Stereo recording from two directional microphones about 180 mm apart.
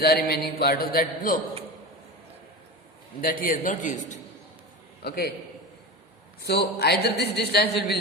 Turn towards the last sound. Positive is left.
turn(degrees=65)  # may be behind; listen again after turning